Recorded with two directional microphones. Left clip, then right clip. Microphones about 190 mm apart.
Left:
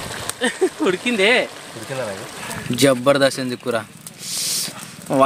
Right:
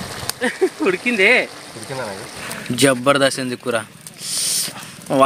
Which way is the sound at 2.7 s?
Centre (ahead or behind).